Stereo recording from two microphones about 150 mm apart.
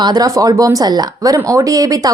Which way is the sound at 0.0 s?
25° right (ahead or behind).